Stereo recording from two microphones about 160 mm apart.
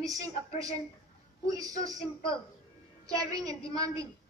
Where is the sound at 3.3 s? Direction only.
20° right (ahead or behind).